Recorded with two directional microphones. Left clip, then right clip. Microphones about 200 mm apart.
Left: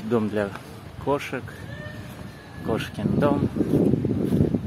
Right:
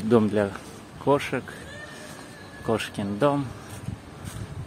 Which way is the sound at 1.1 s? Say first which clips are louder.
Right 3 dB; 20° right (ahead or behind).